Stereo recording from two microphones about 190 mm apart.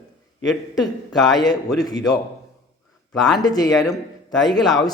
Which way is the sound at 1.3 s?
20° left (ahead or behind).